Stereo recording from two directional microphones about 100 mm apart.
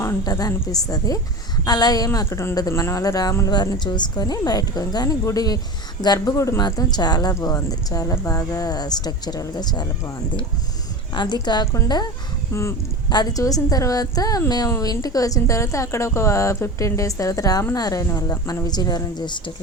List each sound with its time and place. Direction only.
0.0 s a woman's voice: 35° left (ahead or behind)
2.1 s a woman's voice: 30° left (ahead or behind)
6.3 s a woman's voice: 30° left (ahead or behind)
6.6 s a woman's voice: 45° left (ahead or behind)
11.1 s speech: 45° left (ahead or behind)
12.5 s speech: 25° left (ahead or behind)
13.1 s a woman's voice: 40° left (ahead or behind)